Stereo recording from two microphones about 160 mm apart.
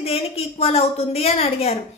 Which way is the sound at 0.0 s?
40° left (ahead or behind).